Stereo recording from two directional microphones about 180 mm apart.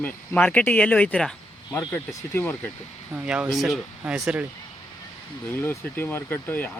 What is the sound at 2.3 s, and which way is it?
Speech, 10° left (ahead or behind).